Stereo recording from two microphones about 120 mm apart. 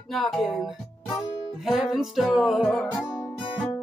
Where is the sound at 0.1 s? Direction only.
Centre (ahead or behind).